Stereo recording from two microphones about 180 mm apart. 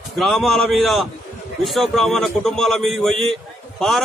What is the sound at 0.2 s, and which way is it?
A man's voice, centre (ahead or behind).